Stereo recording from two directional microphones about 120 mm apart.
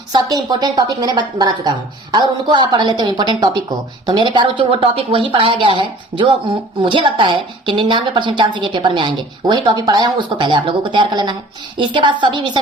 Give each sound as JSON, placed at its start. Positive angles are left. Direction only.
{"t": 0.1, "sound": "a woman's voice", "side_deg": -35}